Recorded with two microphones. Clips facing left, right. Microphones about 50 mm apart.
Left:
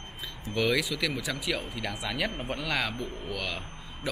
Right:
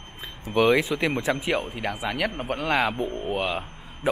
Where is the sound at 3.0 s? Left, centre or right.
Right.